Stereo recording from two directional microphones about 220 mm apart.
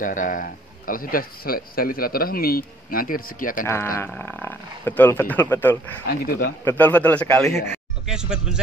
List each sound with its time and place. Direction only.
0.0 s speech: 35° left (ahead or behind)
3.6 s speech: 10° left (ahead or behind)
6.0 s speech: 40° left (ahead or behind)
6.6 s speech: 10° left (ahead or behind)
8.1 s speech: 5° right (ahead or behind)